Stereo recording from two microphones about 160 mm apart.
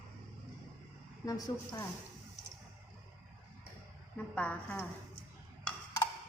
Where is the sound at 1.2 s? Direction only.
20° left (ahead or behind).